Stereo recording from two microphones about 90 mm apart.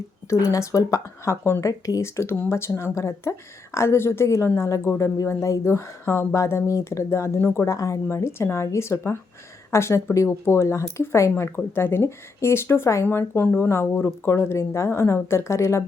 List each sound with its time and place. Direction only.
0.3 s speech: 40° left (ahead or behind)